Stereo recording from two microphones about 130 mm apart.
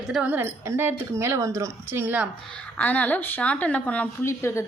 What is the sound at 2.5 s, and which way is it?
A woman's voice, 10° left (ahead or behind).